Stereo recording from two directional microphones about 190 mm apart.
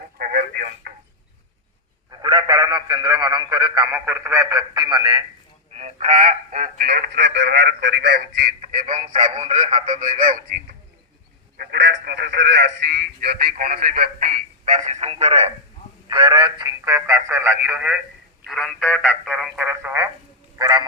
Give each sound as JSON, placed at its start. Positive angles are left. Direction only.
{"t": 0.2, "sound": "telephone", "side_deg": -50}
{"t": 2.0, "sound": "speech", "side_deg": -20}
{"t": 5.7, "sound": "speech", "side_deg": -35}
{"t": 20.6, "sound": "frog", "side_deg": -20}